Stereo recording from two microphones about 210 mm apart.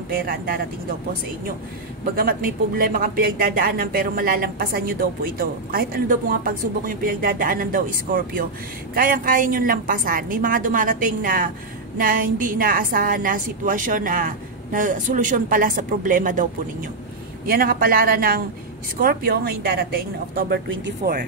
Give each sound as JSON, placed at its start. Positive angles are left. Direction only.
{"t": 0.1, "sound": "speech", "side_deg": -45}
{"t": 2.1, "sound": "a woman's voice", "side_deg": -45}
{"t": 17.5, "sound": "speech", "side_deg": -45}